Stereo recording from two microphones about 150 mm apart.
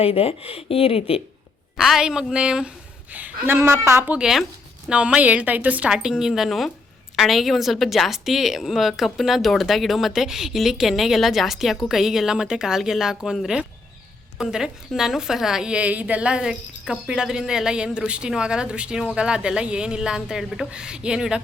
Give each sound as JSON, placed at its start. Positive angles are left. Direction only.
{"t": 0.0, "sound": "speech", "side_deg": 40}
{"t": 1.7, "sound": "a woman's voice", "side_deg": 0}